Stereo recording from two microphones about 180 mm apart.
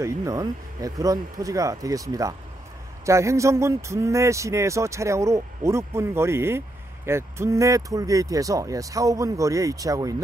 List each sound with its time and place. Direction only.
0.0 s speech: 20° right (ahead or behind)